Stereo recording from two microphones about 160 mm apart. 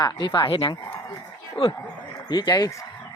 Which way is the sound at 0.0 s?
25° left (ahead or behind).